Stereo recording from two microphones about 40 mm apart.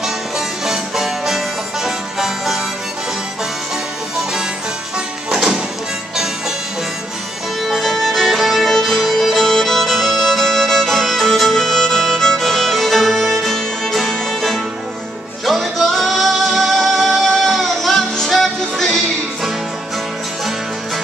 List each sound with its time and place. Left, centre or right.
0.0 s music: centre
4.2 s music: centre
7.6 s music: centre